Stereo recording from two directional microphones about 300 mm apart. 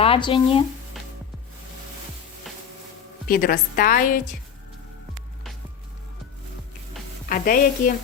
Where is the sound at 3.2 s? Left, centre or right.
Left.